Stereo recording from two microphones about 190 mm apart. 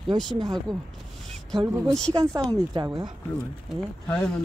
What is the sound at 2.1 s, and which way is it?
Speech, 15° right (ahead or behind).